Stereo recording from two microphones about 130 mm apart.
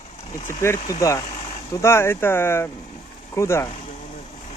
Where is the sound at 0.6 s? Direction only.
25° left (ahead or behind).